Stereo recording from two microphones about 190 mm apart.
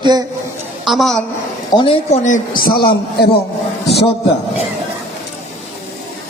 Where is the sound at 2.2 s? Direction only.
45° left (ahead or behind).